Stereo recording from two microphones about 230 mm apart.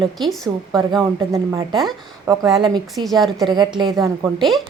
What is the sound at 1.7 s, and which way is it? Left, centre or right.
Speech, centre.